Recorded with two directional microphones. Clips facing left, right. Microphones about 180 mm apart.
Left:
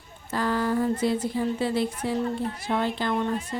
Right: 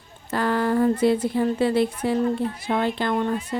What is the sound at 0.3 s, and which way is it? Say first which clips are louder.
Speech: right 3 dB; 65° right (ahead or behind).